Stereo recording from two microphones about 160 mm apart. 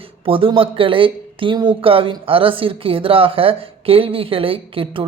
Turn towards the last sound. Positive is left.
turn(degrees=-35)  # may be behind; listen again after turning